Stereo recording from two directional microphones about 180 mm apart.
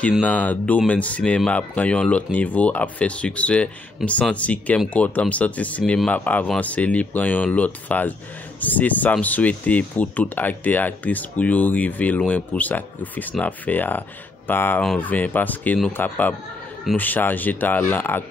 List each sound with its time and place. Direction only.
0.2 s speech: 10° left (ahead or behind)